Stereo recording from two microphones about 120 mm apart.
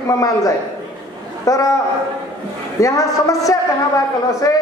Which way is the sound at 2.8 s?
30° left (ahead or behind).